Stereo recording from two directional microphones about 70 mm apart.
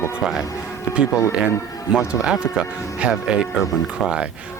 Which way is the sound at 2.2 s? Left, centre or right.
Centre.